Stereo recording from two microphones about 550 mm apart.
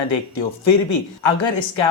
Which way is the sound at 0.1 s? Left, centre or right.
Left.